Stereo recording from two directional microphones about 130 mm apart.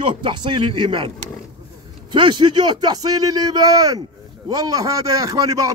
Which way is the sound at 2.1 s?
35° right (ahead or behind).